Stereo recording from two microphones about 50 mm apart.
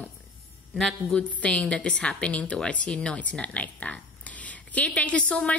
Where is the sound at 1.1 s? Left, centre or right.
Left.